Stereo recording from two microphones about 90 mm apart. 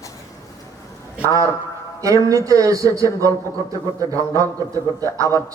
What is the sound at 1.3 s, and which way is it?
Speech, 40° right (ahead or behind).